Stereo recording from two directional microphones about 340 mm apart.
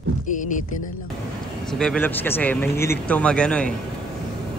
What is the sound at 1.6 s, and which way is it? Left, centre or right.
Speech, centre.